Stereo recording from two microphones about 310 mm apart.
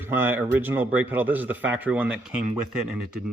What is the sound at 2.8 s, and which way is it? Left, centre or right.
Speech, right.